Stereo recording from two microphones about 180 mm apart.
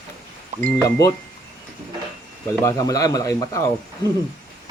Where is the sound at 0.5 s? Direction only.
15° left (ahead or behind).